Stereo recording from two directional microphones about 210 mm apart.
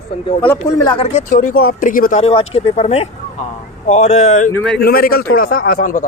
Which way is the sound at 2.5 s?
30° left (ahead or behind).